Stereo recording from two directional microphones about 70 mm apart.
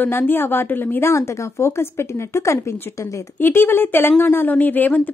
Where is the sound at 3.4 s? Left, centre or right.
Left.